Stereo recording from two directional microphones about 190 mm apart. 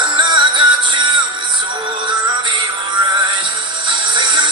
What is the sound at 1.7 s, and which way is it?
Synthetic singing, 25° right (ahead or behind).